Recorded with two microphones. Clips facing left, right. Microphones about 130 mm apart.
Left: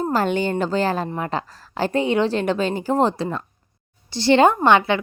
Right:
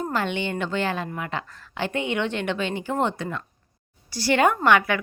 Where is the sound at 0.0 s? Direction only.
40° left (ahead or behind).